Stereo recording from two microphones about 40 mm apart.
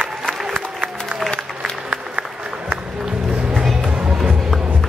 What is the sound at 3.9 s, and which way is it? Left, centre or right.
Music, right.